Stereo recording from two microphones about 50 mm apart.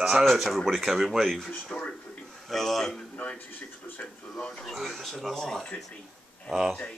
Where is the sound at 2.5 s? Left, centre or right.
Centre.